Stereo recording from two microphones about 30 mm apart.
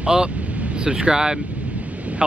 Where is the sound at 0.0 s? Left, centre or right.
Right.